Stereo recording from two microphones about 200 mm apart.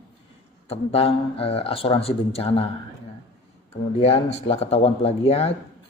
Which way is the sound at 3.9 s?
30° left (ahead or behind).